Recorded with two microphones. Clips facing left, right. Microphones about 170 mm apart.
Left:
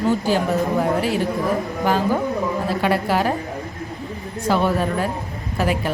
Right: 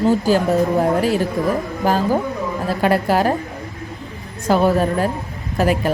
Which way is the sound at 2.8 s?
45° right (ahead or behind).